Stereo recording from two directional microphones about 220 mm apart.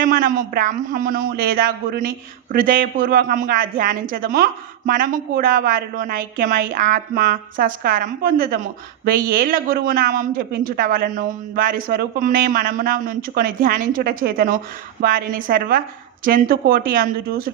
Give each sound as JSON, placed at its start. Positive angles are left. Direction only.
{"t": 0.0, "sound": "a woman's voice", "side_deg": -35}